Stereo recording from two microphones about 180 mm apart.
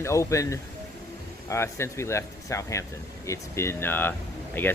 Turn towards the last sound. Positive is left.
turn(degrees=10)  # may be behind; listen again after turning